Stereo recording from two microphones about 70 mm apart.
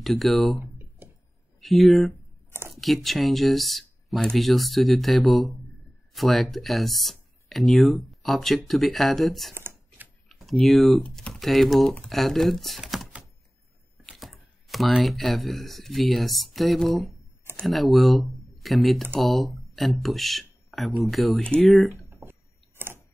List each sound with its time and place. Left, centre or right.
0.0 s speech: centre
0.6 s a sound: right
1.6 s speech: centre
9.5 s shuffling cards: right
10.2 s typing: centre
11.1 s speech: centre
14.0 s chopping: centre
15.0 s speech: centre
21.4 s speech: centre
22.2 s a sound: right